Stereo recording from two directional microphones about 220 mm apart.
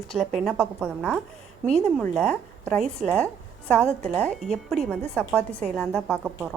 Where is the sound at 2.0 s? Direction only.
5° left (ahead or behind).